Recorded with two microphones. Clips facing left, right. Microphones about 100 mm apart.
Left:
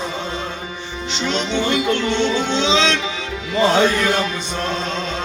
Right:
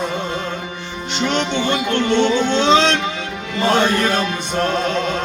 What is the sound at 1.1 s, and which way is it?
Music, 55° right (ahead or behind).